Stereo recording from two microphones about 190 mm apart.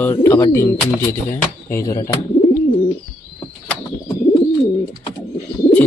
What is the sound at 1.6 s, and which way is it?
Speech, 15° left (ahead or behind).